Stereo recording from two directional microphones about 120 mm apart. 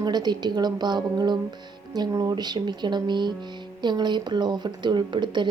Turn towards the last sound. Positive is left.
turn(degrees=-40)  # may be behind; listen again after turning